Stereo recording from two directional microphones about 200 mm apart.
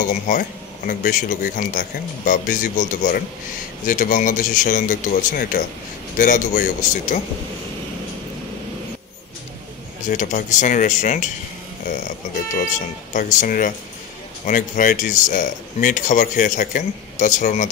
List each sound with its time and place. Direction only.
0.1 s speech: 45° left (ahead or behind)
10.0 s speech: 40° left (ahead or behind)
13.1 s speech: 40° left (ahead or behind)